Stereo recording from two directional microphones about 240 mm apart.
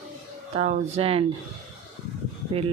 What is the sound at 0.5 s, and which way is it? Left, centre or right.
Speech, right.